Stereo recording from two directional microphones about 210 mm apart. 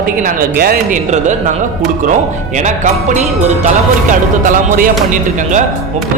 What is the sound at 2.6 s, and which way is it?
Speech, 35° right (ahead or behind).